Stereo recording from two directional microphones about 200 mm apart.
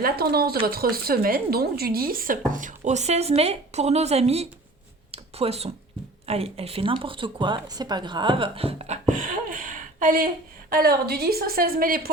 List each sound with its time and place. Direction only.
0.0 s a woman's voice: 50° right (ahead or behind); by 4.4 s 30° right (ahead or behind)
5.1 s a sound: 30° right (ahead or behind)
6.2 s a woman's voice: 30° right (ahead or behind); by 12.1 s 45° right (ahead or behind)